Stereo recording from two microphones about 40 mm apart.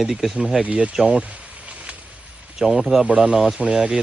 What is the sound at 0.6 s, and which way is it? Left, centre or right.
Speech, right.